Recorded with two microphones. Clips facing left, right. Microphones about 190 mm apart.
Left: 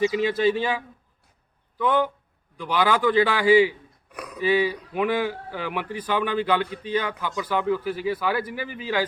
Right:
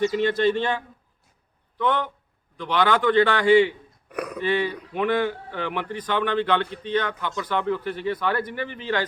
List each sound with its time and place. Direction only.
0.0 s speech: 5° left (ahead or behind)
1.8 s speech: 10° left (ahead or behind)
4.1 s a sound: 60° right (ahead or behind)
4.4 s speech: 5° left (ahead or behind)